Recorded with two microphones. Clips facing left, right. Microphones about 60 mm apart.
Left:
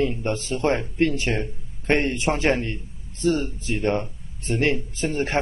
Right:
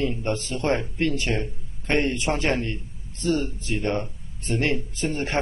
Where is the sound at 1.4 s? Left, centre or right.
Left.